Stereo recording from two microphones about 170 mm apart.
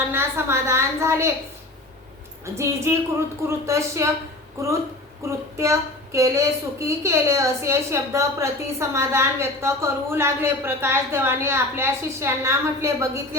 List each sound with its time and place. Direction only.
0.1 s a child's voice: 15° right (ahead or behind)
2.6 s a child's voice: 15° right (ahead or behind)